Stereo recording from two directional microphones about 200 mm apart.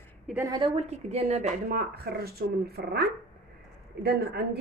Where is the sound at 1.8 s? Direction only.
50° right (ahead or behind).